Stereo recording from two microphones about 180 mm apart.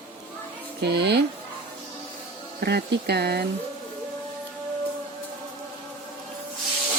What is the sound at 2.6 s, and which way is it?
Speech, 65° right (ahead or behind).